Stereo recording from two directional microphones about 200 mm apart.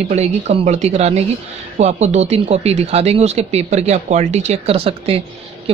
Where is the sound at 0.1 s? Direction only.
35° right (ahead or behind).